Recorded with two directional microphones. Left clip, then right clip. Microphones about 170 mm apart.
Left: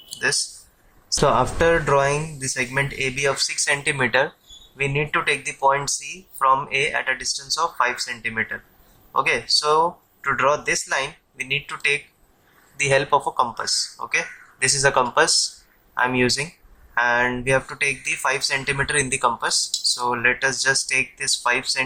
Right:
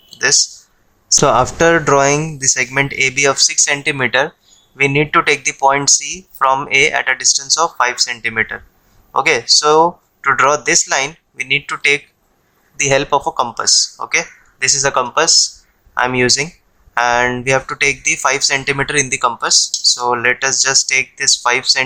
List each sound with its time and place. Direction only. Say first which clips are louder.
1.1 s speech: right 7 dB; 45° right (ahead or behind)
4.8 s speech: right 9 dB; 50° right (ahead or behind)
12.7 s speech: right 5 dB; 30° right (ahead or behind)
14.7 s speech: right 3 dB; 25° right (ahead or behind)
16.0 s speech: right 6 dB; 40° right (ahead or behind)